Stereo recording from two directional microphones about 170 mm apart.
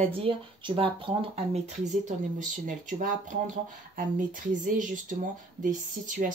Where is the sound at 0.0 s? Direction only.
35° right (ahead or behind).